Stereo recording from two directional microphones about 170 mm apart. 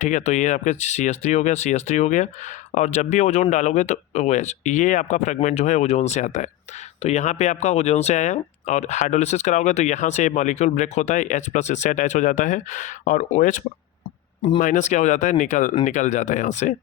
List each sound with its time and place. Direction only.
0.0 s speech: 45° left (ahead or behind)
14.6 s speech: 45° left (ahead or behind)